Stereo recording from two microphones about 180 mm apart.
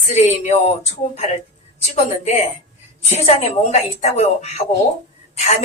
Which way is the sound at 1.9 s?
40° left (ahead or behind).